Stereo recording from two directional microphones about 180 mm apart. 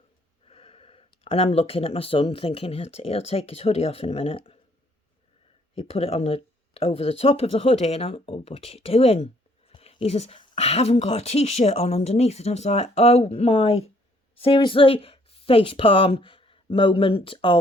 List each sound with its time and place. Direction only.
0.4 s speech: 35° left (ahead or behind)
5.7 s speech: 35° left (ahead or behind)